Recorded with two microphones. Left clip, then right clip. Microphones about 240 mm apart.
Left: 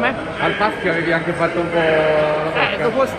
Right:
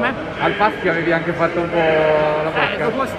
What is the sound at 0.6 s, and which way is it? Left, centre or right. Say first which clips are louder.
Speech: right 1 dB; right.